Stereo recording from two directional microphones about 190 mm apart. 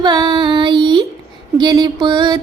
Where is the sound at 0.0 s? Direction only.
20° right (ahead or behind).